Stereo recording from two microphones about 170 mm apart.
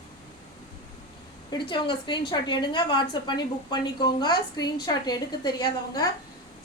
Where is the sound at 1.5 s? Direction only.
30° left (ahead or behind).